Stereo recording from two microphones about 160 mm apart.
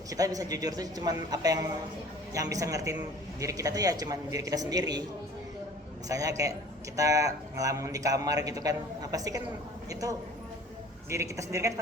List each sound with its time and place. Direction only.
0.1 s a man's voice: 20° right (ahead or behind)
6.1 s a man's voice: 20° right (ahead or behind)